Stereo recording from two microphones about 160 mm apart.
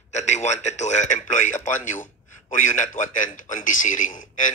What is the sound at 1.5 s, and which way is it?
Speech, 15° left (ahead or behind).